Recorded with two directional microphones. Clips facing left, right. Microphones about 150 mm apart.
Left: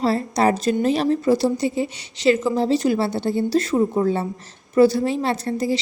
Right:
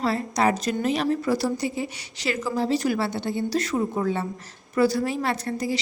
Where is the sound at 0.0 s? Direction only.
30° left (ahead or behind).